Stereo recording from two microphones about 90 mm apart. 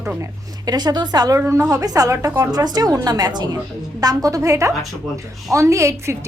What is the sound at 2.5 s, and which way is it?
A woman's voice, 50° right (ahead or behind).